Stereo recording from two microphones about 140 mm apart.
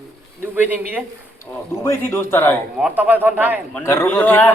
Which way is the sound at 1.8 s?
15° left (ahead or behind).